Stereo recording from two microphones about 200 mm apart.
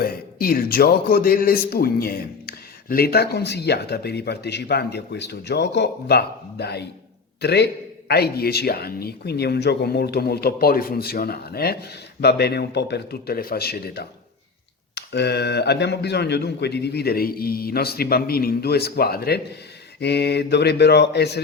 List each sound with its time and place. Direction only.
0.0 s a man's voice: 45° left (ahead or behind)